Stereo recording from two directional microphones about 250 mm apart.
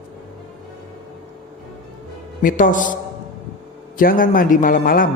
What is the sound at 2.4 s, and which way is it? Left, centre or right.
Speech, left.